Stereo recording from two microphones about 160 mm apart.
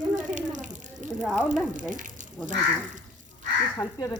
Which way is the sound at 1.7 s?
55° right (ahead or behind).